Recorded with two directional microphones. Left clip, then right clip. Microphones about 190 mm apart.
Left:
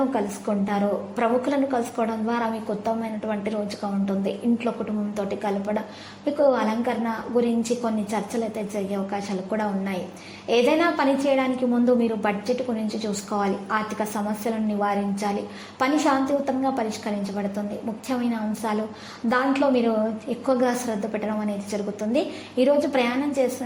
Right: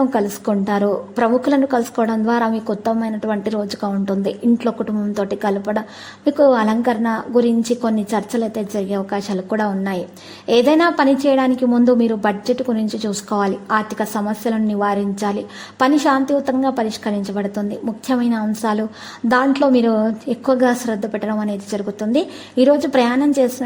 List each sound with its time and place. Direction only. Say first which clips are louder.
0.1 s a woman's voice: right 7 dB; 35° right (ahead or behind)